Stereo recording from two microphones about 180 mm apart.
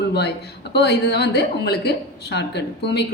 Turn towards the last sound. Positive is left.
turn(degrees=70)  # may be behind; listen again after turning